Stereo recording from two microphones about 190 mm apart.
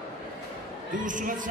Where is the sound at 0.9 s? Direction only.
45° right (ahead or behind).